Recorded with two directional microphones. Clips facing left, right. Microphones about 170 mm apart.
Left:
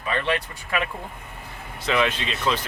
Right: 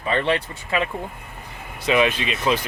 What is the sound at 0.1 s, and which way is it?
Speech, 30° right (ahead or behind).